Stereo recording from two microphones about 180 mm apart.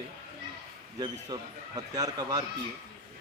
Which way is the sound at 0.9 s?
20° right (ahead or behind).